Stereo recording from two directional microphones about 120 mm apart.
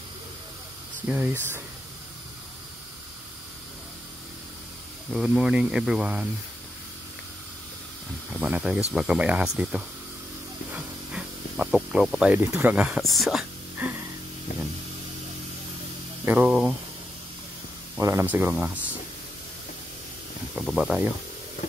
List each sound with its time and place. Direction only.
1.0 s speech: 15° right (ahead or behind)
5.1 s speech: 5° right (ahead or behind)
8.3 s speech: 10° right (ahead or behind)
10.7 s snake: 10° right (ahead or behind)
12.4 s speech: 20° right (ahead or behind)
13.0 s speech: centre (ahead or behind)
13.8 s speech: 10° right (ahead or behind)
16.3 s speech: 5° right (ahead or behind)
18.2 s speech: 15° right (ahead or behind)
20.5 s speech: centre (ahead or behind)